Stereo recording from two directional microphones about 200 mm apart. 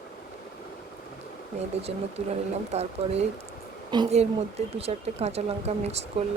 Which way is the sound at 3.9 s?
20° right (ahead or behind).